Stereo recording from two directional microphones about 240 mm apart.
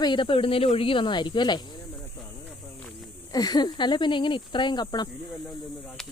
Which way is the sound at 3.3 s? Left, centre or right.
Centre.